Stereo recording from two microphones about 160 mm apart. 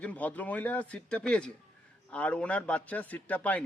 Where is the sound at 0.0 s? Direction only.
10° left (ahead or behind).